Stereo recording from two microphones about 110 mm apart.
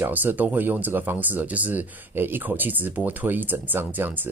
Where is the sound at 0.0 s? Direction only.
15° right (ahead or behind).